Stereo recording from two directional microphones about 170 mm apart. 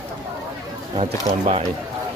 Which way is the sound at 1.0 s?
35° right (ahead or behind).